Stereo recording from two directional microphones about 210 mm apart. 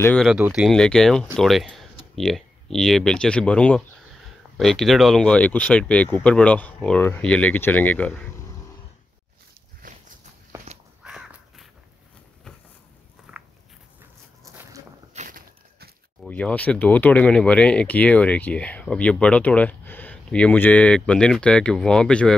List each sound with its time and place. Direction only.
0.0 s speech: 5° left (ahead or behind)
9.9 s walk: 40° right (ahead or behind)
11.1 s crow: 5° right (ahead or behind)
13.3 s a sound: 5° right (ahead or behind)
15.1 s a sound: 40° right (ahead or behind)
16.2 s speech: 5° left (ahead or behind)